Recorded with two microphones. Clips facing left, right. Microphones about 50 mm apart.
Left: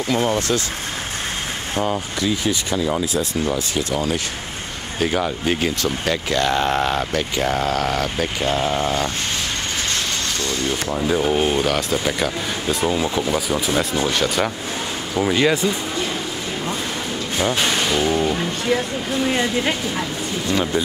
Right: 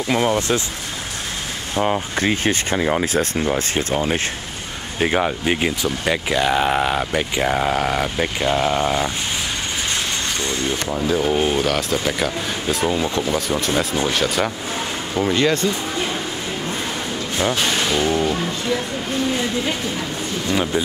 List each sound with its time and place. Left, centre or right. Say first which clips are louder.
0.1 s speech: right 1 dB; right
2.1 s speech: right 2 dB; right; by 9.1 s centre
11.0 s speech: even; centre
17.4 s speech: even; centre
19.2 s speech: left 3 dB; left
20.4 s speech: even; centre